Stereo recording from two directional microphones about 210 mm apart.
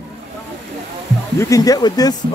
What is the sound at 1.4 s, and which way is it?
Speech, 15° left (ahead or behind).